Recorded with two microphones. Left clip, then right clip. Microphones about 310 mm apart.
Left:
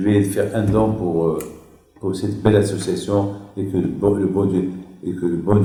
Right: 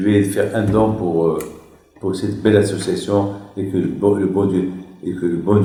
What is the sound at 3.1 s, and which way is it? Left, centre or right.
Speech, centre.